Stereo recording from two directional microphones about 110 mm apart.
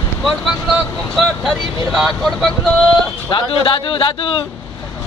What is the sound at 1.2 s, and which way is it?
Speech, centre (ahead or behind).